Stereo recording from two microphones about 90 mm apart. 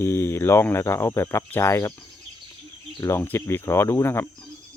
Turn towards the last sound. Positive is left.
turn(degrees=25)  # may be behind; listen again after turning